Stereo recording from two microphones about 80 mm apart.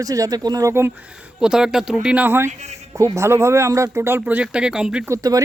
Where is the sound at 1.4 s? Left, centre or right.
Centre.